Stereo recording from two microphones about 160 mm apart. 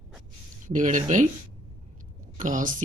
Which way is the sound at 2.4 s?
55° right (ahead or behind).